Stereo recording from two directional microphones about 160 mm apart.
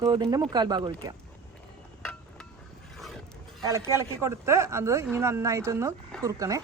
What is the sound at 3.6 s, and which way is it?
Speech, 15° right (ahead or behind).